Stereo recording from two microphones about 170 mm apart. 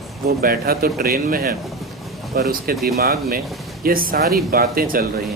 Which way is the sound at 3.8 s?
55° right (ahead or behind).